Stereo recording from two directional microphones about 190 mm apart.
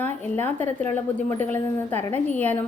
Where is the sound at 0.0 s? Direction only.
10° left (ahead or behind).